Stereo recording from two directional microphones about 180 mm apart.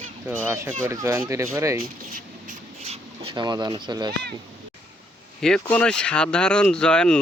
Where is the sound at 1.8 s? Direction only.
50° right (ahead or behind).